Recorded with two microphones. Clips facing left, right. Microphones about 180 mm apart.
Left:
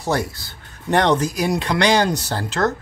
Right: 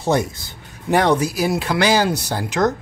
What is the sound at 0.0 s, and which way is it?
Speech, 20° right (ahead or behind).